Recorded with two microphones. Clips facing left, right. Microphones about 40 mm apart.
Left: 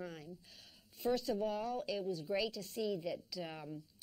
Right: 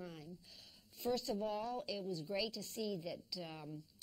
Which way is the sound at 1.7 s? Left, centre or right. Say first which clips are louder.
Left 4 dB; centre.